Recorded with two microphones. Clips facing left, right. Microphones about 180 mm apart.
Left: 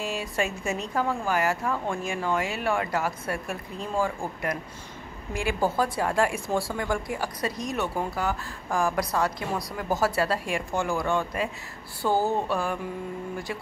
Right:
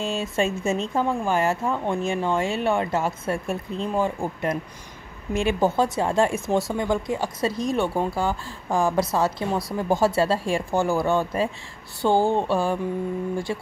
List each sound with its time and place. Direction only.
0.0 s speech: 25° right (ahead or behind)